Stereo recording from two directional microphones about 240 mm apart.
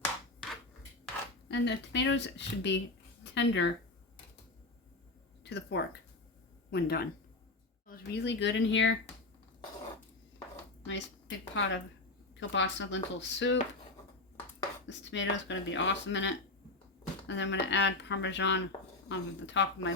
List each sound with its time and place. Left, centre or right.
1.5 s speech: left
5.4 s speech: left
10.8 s speech: left
14.8 s speech: left